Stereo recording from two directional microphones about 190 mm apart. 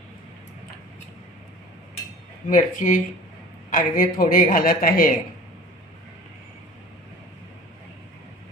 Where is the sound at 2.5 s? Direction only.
45° left (ahead or behind).